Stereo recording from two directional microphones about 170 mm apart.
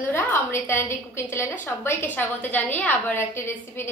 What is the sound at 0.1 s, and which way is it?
A woman's voice, 15° left (ahead or behind).